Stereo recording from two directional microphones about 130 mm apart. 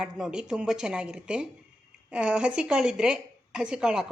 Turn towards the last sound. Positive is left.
turn(degrees=-5)  # may be behind; listen again after turning